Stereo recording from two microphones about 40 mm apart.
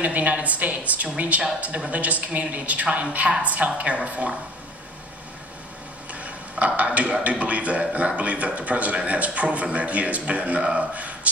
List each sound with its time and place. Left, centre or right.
0.0 s a man's voice: right
6.1 s a sound: right
7.2 s a man's voice: right